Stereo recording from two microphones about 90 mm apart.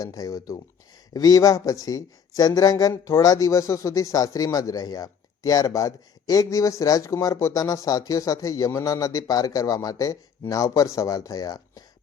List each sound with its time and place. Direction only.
0.0 s speech: 40° left (ahead or behind)
2.9 s speech: 30° left (ahead or behind)